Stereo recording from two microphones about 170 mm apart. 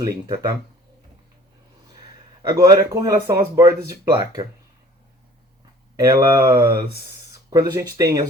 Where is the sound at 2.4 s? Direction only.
20° right (ahead or behind).